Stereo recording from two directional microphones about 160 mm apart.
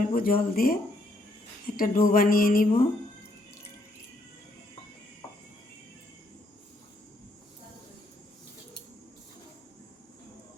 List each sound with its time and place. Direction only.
0.0 s speech: 65° left (ahead or behind)